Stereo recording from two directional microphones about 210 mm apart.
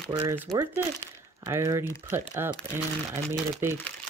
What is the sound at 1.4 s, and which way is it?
Speech, 15° right (ahead or behind).